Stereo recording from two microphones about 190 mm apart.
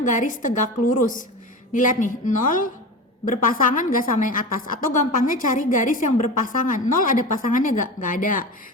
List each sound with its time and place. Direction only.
0.0 s a woman's voice: 40° left (ahead or behind)